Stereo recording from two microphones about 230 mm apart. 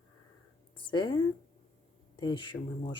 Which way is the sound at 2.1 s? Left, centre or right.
Centre.